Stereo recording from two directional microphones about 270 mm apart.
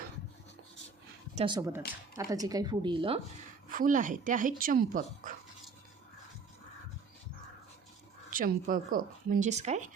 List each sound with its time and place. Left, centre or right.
1.4 s a woman's voice: centre
3.7 s speech: right
8.3 s speech: right